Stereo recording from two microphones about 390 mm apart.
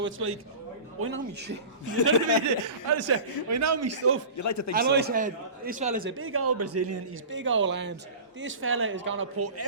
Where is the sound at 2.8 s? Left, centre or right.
Right.